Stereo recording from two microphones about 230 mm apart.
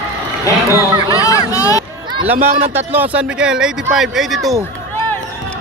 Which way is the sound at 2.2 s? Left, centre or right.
Centre.